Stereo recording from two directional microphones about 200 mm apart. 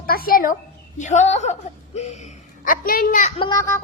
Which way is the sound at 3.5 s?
15° left (ahead or behind).